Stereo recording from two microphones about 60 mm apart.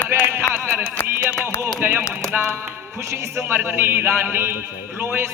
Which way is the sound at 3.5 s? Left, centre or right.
Right.